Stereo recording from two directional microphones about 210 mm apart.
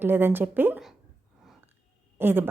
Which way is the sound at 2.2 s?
10° right (ahead or behind).